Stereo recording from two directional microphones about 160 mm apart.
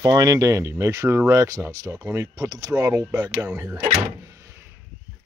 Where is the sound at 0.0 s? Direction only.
25° right (ahead or behind).